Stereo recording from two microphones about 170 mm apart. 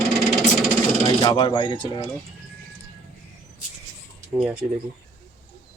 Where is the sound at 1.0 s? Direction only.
25° left (ahead or behind).